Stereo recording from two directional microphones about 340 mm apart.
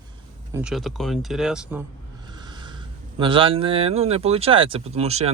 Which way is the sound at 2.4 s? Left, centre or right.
Centre.